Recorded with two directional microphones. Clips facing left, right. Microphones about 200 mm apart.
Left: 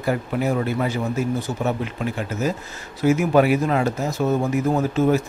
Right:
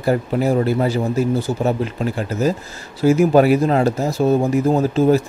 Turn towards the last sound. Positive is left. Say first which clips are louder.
# right 4 dB
turn(degrees=-30)  # may be behind; listen again after turning